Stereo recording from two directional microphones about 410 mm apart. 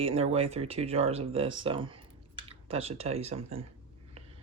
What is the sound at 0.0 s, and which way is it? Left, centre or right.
Speech, centre.